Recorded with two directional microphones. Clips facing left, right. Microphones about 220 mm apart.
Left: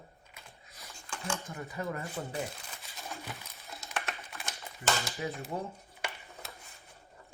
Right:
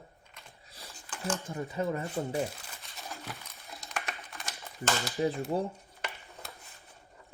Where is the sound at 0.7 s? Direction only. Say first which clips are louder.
Right 3 dB; 30° right (ahead or behind).